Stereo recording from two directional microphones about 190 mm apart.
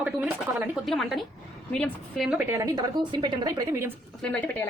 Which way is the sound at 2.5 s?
15° right (ahead or behind).